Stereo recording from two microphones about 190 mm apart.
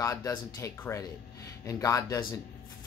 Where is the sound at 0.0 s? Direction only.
20° left (ahead or behind).